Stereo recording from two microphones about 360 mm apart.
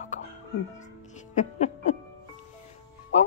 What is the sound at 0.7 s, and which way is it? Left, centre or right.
Music, centre.